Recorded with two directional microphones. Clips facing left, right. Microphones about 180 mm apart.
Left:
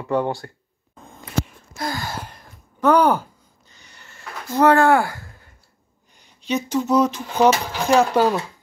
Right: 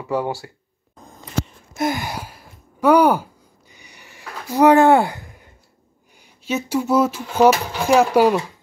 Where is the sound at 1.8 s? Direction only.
20° right (ahead or behind).